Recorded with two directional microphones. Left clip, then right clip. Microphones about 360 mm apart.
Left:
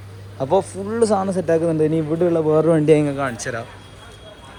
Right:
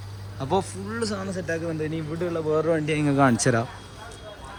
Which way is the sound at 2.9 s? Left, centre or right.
Centre.